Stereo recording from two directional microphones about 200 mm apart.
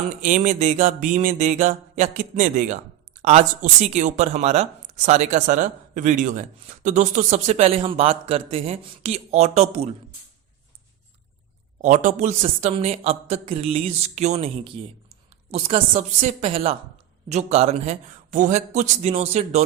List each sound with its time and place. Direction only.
0.2 s speech: 40° right (ahead or behind)
11.8 s speech: 40° right (ahead or behind)